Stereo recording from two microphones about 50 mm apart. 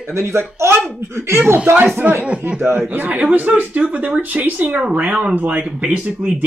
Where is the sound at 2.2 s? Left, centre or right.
Right.